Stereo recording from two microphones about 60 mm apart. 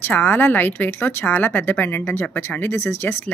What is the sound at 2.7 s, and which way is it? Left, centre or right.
Speech, left.